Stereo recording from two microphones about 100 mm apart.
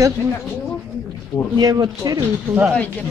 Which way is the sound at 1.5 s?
40° right (ahead or behind).